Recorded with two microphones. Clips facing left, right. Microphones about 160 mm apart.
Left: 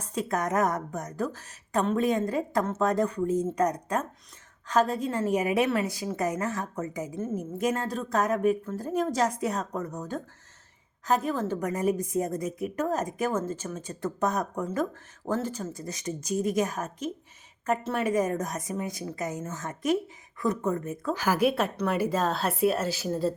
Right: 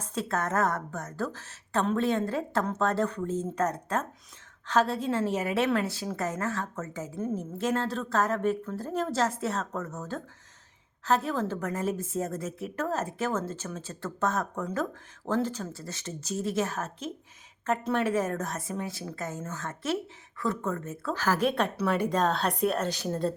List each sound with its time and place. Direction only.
0.0 s a woman's voice: 10° left (ahead or behind)